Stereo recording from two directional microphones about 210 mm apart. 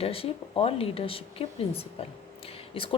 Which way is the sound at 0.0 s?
25° left (ahead or behind).